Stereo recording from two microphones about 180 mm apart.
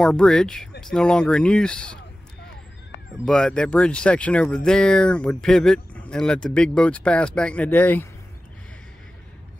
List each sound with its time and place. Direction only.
0.0 s speech: 5° left (ahead or behind)
3.3 s speech: 5° left (ahead or behind)